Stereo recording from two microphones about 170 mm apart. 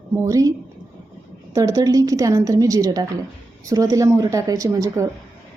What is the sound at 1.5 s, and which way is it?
A woman's voice, 20° right (ahead or behind).